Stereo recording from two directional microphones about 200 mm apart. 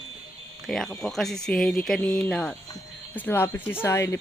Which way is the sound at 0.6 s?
Centre (ahead or behind).